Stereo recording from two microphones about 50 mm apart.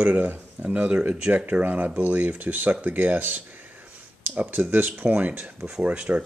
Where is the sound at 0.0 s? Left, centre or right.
Right.